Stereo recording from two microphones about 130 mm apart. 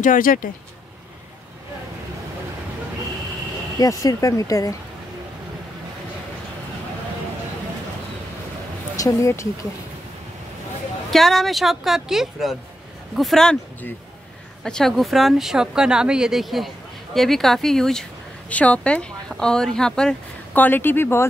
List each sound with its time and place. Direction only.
0.0 s speech: 90° left
3.8 s speech: 25° left (ahead or behind)
8.9 s speech: 25° left (ahead or behind)
11.1 s speech: centre (ahead or behind)
14.6 s speech: 5° left (ahead or behind)